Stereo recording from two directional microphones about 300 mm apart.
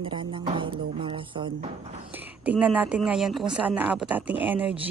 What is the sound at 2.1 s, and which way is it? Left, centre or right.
A woman's voice, centre.